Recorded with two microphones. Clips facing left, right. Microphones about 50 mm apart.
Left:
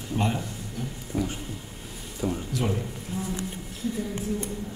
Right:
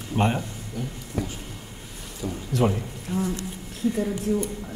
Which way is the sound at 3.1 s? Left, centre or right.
Right.